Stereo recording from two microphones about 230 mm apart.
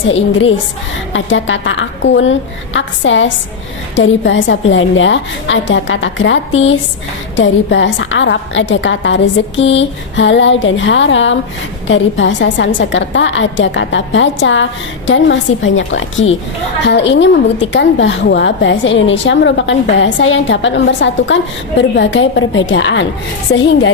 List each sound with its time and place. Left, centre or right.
1.1 s a woman's voice: left